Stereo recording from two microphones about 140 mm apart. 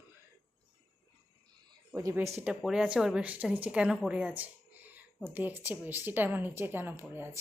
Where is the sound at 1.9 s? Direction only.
25° right (ahead or behind).